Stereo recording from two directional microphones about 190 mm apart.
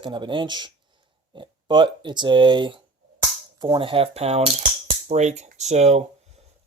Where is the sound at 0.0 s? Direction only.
25° right (ahead or behind).